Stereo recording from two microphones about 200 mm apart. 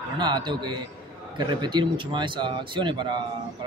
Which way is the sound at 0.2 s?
20° right (ahead or behind).